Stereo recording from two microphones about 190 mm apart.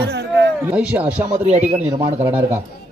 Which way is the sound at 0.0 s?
60° right (ahead or behind).